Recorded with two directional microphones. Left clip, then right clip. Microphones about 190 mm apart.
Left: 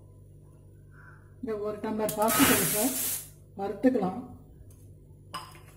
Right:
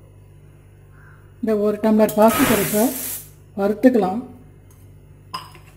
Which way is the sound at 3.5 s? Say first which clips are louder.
Right 11 dB; 50° right (ahead or behind).